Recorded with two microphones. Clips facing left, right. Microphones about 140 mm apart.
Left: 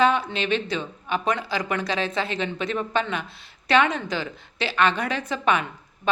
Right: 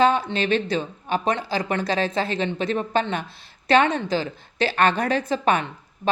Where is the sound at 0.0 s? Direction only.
35° right (ahead or behind).